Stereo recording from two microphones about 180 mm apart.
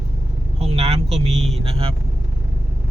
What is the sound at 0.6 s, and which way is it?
Speech, 35° right (ahead or behind).